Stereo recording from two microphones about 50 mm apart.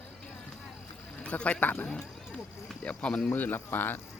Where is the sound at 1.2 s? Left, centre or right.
Left.